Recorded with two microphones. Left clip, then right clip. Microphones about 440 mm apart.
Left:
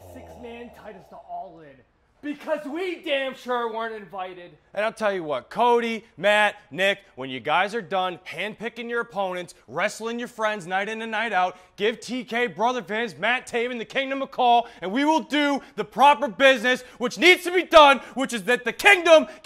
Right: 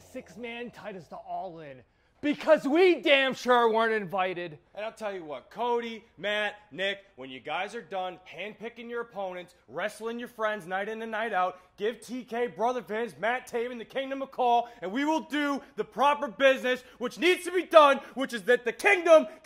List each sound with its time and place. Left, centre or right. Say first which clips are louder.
2.2 s speech: right 5 dB; right
4.7 s speech: left 11 dB; left
7.2 s speech: left 11 dB; left; by 11.5 s centre
11.8 s a man's voice: left 7 dB; left